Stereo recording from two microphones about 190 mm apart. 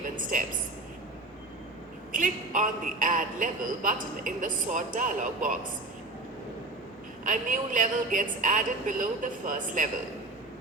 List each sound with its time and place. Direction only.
0.2 s a woman's voice: 45° right (ahead or behind)
2.1 s a man's voice: 45° right (ahead or behind)
7.3 s a man's voice: 45° right (ahead or behind)